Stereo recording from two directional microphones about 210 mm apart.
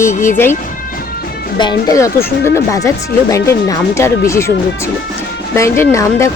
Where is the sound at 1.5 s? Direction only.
20° left (ahead or behind).